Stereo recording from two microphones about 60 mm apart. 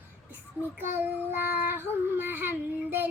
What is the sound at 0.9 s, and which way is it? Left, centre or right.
Child singing, right.